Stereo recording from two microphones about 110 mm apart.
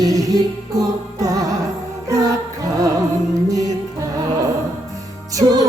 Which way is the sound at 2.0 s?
30° right (ahead or behind).